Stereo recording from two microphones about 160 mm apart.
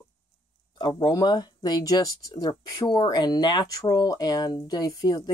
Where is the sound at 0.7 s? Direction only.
30° left (ahead or behind).